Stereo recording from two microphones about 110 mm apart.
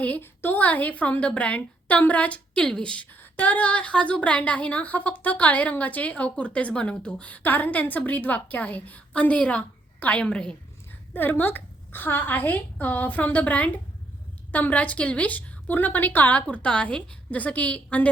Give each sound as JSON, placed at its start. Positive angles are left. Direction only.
{"t": 0.0, "sound": "a woman's voice", "side_deg": 15}